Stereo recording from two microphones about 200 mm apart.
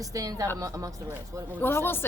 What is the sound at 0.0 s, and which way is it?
Speech, 15° right (ahead or behind).